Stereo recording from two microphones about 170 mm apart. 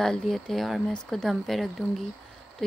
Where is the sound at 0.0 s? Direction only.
Centre (ahead or behind).